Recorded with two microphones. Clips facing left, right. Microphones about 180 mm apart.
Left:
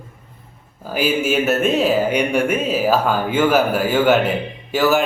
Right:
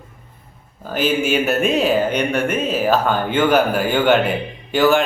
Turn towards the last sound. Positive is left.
turn(degrees=5)  # may be behind; listen again after turning